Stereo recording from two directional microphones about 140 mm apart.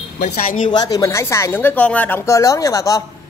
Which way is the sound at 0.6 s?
30° left (ahead or behind).